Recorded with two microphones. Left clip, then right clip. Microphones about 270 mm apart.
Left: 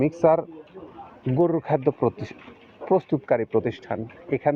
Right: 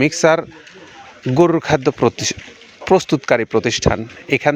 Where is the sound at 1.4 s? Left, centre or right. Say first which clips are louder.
Right 7 dB; right.